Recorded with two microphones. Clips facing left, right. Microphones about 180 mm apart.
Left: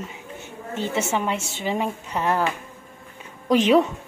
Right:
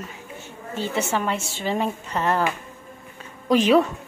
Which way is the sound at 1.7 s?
10° left (ahead or behind).